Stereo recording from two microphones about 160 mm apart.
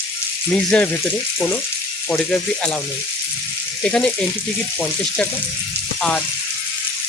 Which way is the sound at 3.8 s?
5° left (ahead or behind).